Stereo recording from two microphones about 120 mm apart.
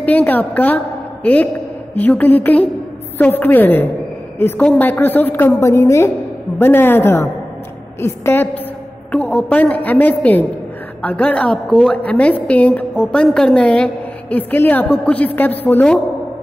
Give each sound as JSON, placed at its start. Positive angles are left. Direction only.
{"t": 0.0, "sound": "a woman's voice", "side_deg": 15}